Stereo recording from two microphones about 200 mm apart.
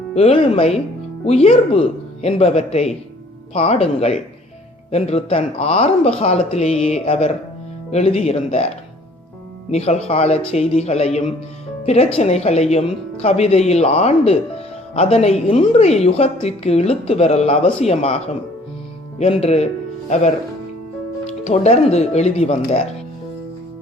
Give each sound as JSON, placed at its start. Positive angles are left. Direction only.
{"t": 0.1, "sound": "a woman's voice", "side_deg": 30}
{"t": 9.7, "sound": "a woman's voice", "side_deg": 30}
{"t": 19.2, "sound": "a woman's voice", "side_deg": 30}
{"t": 21.2, "sound": "a woman's voice", "side_deg": 35}